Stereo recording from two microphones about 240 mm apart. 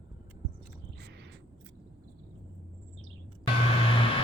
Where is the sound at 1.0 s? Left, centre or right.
Right.